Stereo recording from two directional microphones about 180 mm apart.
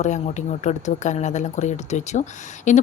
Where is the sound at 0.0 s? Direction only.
40° left (ahead or behind).